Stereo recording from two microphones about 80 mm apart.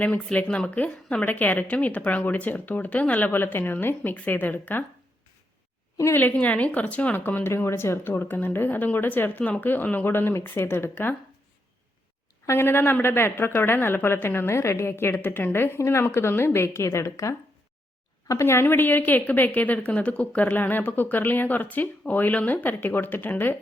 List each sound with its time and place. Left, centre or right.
0.0 s speech: centre
1.2 s a woman's voice: left
6.1 s a woman's voice: left
7.5 s a woman's voice: left
12.5 s a woman's voice: left